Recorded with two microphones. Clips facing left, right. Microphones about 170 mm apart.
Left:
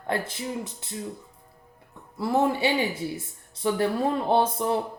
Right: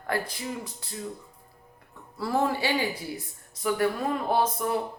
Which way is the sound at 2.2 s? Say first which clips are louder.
Left 3 dB; 20° left (ahead or behind).